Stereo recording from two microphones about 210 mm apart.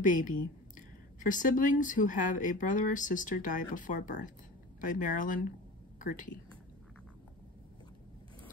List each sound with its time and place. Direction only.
0.0 s speech: 40° left (ahead or behind)